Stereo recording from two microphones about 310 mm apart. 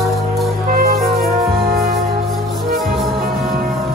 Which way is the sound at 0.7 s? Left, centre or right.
Right.